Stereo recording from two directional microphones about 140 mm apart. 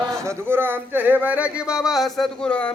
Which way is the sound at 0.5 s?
15° right (ahead or behind).